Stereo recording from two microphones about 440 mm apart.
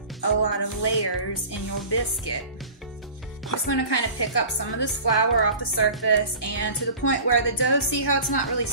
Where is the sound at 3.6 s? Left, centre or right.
Left.